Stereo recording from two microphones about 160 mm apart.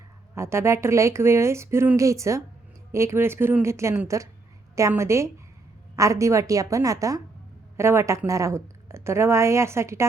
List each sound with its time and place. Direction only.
0.3 s a woman's voice: 15° right (ahead or behind)